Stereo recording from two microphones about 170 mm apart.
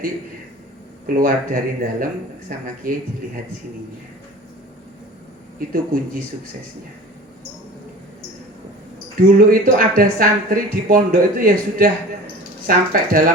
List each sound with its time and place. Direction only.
1.0 s speech: 55° right (ahead or behind)
5.5 s speech: 55° right (ahead or behind)
9.1 s speech: 55° right (ahead or behind)